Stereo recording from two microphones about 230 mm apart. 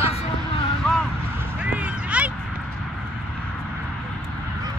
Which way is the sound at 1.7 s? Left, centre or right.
Centre.